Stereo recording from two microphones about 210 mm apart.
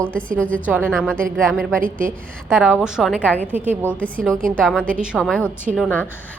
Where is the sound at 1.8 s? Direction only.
40° right (ahead or behind).